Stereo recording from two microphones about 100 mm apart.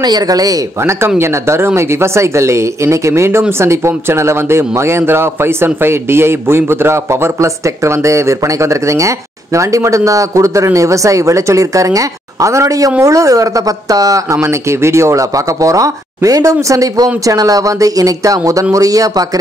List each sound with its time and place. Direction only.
0.0 s speech: 40° right (ahead or behind)
1.0 s speech: 25° right (ahead or behind)